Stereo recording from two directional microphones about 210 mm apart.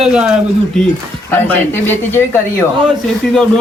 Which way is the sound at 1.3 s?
10° left (ahead or behind).